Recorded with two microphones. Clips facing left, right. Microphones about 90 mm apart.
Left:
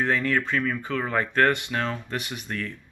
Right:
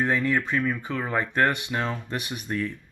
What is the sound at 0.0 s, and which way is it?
Speech, 15° right (ahead or behind).